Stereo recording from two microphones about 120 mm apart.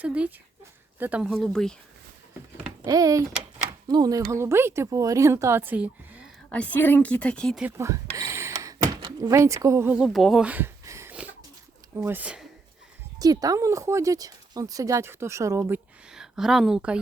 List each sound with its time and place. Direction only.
0.0 s speech: 10° right (ahead or behind)
1.2 s speech: 5° left (ahead or behind)
2.8 s speech: 30° right (ahead or behind); by 6.2 s 10° right (ahead or behind)
6.5 s a woman's voice: 15° left (ahead or behind)
7.8 s a sound: 25° right (ahead or behind)
9.3 s speech: 25° right (ahead or behind)
9.9 s speech: 5° right (ahead or behind)
10.4 s speech: 10° right (ahead or behind)
10.8 s a sound: 25° right (ahead or behind)
11.1 s a sound: 10° right (ahead or behind)
12.0 s speech: 15° right (ahead or behind)
13.1 s speech: 30° right (ahead or behind)
16.1 s speech: 5° right (ahead or behind)